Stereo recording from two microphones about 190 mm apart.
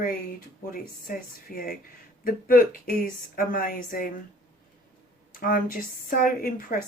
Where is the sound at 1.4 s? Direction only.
50° left (ahead or behind).